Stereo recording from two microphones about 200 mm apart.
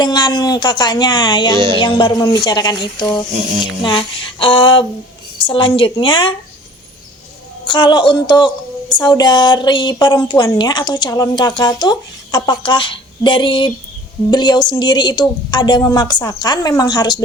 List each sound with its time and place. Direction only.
0.0 s a woman's voice: 20° left (ahead or behind)
1.5 s music: 25° right (ahead or behind)
1.8 s a woman's voice: 20° left (ahead or behind)
7.6 s a woman's voice: 20° left (ahead or behind)